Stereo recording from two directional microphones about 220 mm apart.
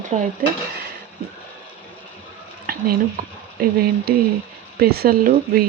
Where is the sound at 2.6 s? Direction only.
40° right (ahead or behind).